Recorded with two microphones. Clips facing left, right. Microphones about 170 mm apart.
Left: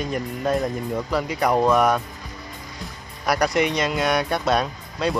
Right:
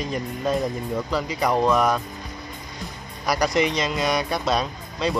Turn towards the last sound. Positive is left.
turn(degrees=5)  # may be behind; listen again after turning